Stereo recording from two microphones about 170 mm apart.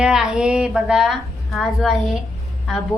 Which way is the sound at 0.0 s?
5° right (ahead or behind).